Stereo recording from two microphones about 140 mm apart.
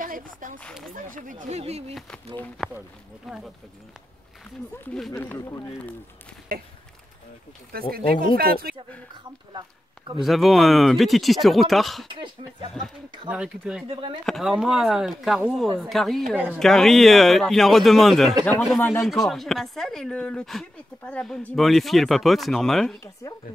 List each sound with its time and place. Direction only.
0.0 s speech: 75° right (ahead or behind)
1.6 s speech: 45° right (ahead or behind)
2.6 s speech: centre (ahead or behind)
5.1 s speech: 15° left (ahead or behind)
8.4 s speech: 90° right
9.1 s speech: 30° right (ahead or behind)
10.2 s speech: centre (ahead or behind)
12.1 s speech: 35° right (ahead or behind)
13.3 s speech: 5° right (ahead or behind)
23.2 s speech: 20° left (ahead or behind)